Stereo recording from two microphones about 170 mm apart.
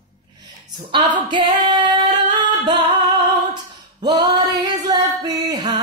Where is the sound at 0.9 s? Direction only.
30° right (ahead or behind).